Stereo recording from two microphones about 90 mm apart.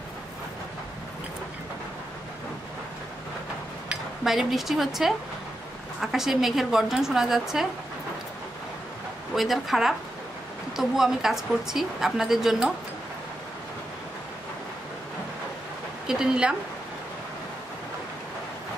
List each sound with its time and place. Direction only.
3.9 s a woman's voice: 5° right (ahead or behind)
9.3 s a woman's voice: centre (ahead or behind)
16.1 s speech: 10° right (ahead or behind)